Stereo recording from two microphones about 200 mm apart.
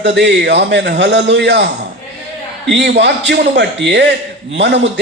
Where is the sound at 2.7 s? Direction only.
60° right (ahead or behind).